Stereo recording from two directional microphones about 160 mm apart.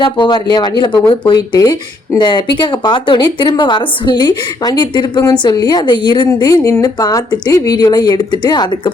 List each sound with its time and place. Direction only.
0.0 s speech: 30° left (ahead or behind)